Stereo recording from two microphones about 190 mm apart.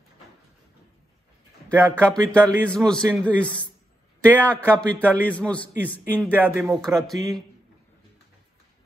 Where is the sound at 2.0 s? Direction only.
5° left (ahead or behind).